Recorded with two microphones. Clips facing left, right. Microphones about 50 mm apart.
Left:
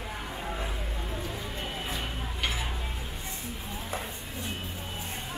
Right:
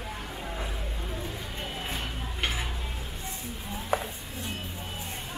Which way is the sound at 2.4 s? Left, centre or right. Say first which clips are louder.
Right 1 dB; right.